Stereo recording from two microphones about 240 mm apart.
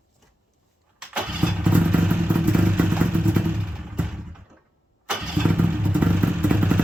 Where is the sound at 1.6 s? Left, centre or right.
Centre.